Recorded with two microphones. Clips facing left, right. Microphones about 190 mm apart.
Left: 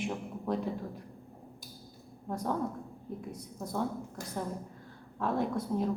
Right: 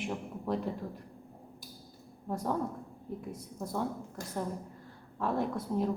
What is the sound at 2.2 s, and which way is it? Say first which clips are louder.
A woman's voice: even; 5° right (ahead or behind).